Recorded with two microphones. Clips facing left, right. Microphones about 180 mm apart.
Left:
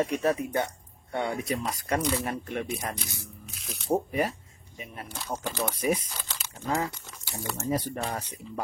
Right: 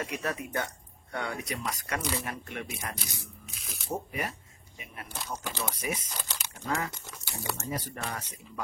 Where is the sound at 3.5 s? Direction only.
Centre (ahead or behind).